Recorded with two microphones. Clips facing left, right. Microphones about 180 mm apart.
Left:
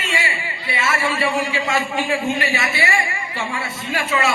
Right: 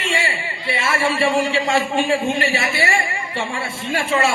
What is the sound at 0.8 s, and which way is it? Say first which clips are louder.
A man's voice: right 2 dB; 30° right (ahead or behind).